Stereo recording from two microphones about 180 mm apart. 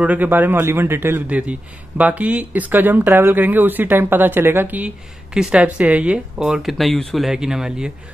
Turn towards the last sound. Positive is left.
turn(degrees=-5)  # may be behind; listen again after turning